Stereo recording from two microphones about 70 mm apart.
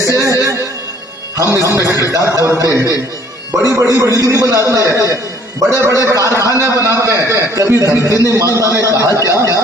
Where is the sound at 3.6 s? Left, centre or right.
Right.